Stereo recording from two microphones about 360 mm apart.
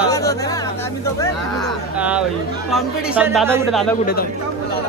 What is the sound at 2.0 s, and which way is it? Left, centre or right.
Speech, centre.